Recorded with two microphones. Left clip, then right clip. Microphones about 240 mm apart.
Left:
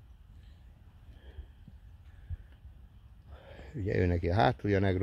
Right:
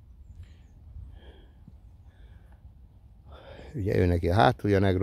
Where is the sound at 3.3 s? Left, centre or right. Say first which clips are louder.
Right 5 dB; centre.